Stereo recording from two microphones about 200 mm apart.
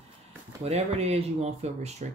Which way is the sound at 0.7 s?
30° right (ahead or behind).